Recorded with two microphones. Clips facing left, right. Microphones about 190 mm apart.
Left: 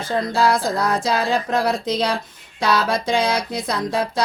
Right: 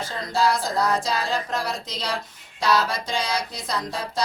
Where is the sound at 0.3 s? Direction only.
55° left (ahead or behind).